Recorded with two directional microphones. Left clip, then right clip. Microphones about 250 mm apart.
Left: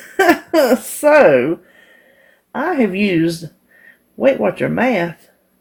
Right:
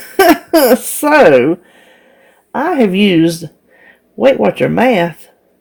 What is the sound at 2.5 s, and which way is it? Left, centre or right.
Speech, right.